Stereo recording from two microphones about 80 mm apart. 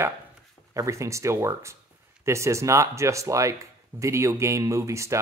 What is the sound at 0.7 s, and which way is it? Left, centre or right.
Speech, right.